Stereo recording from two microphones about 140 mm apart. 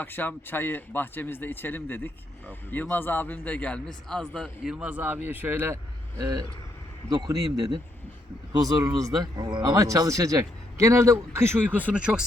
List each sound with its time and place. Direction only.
0.0 s a man's voice: 15° left (ahead or behind)
4.6 s a man's voice: 5° right (ahead or behind)